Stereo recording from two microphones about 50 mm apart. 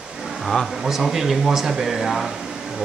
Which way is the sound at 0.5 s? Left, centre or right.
Centre.